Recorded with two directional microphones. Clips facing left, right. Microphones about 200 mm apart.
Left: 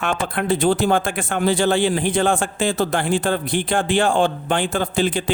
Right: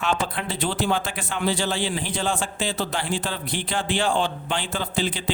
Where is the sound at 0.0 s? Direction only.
55° left (ahead or behind).